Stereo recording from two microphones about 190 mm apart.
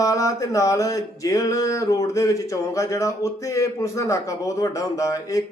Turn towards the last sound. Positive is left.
turn(degrees=15)  # may be behind; listen again after turning